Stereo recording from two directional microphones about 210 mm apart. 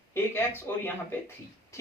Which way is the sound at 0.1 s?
10° left (ahead or behind).